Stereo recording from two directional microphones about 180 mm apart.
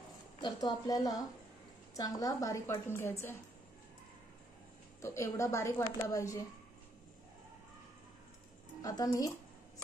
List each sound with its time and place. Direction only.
0.4 s a woman's voice: 20° left (ahead or behind)
5.0 s a woman's voice: 15° left (ahead or behind)
8.8 s a woman's voice: 20° left (ahead or behind)